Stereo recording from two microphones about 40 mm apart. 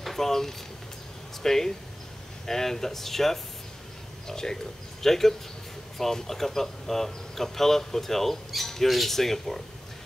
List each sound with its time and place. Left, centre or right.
0.0 s speech: centre